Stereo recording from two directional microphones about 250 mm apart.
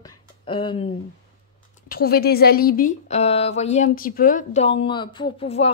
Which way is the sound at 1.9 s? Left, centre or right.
Left.